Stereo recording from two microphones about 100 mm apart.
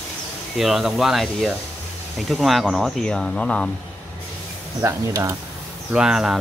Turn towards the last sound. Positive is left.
turn(degrees=-5)  # may be behind; listen again after turning